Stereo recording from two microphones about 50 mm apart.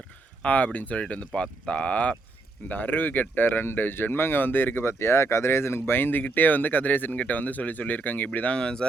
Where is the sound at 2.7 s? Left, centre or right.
Left.